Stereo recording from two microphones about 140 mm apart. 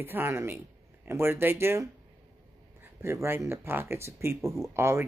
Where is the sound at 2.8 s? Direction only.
20° right (ahead or behind).